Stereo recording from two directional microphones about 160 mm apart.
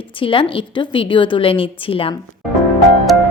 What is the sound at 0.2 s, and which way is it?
A woman's voice, 35° left (ahead or behind).